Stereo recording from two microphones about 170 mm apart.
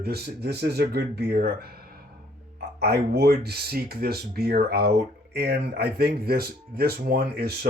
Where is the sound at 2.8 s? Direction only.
70° right (ahead or behind).